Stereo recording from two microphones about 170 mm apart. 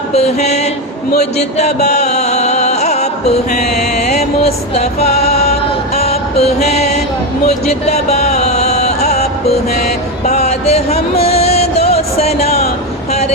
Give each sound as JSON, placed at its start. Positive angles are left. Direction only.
{"t": 0.1, "sound": "speech", "side_deg": 40}
{"t": 1.2, "sound": "music", "side_deg": 40}